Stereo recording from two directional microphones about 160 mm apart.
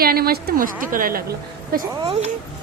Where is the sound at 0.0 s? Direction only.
70° right (ahead or behind).